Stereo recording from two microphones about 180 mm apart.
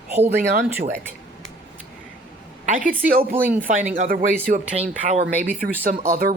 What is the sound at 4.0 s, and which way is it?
Speech, 45° right (ahead or behind).